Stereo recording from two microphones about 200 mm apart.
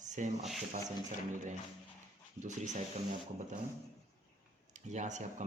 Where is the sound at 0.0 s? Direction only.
40° right (ahead or behind).